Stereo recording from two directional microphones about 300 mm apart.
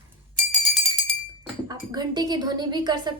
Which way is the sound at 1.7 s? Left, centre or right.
Centre.